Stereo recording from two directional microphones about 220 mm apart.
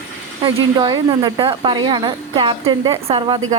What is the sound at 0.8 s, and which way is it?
Speech, 20° right (ahead or behind).